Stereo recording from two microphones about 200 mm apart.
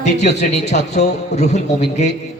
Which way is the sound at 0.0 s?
35° left (ahead or behind).